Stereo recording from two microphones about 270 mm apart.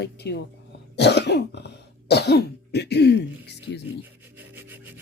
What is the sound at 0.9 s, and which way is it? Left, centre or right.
Cough, left.